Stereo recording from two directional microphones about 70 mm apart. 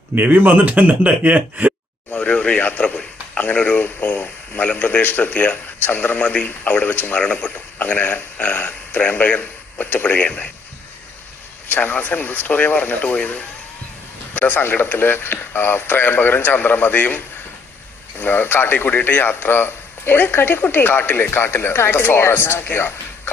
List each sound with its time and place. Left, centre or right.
0.2 s speech: right
2.1 s speech: centre
11.7 s a man's voice: left